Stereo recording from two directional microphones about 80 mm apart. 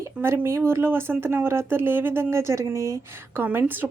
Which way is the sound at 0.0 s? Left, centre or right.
Right.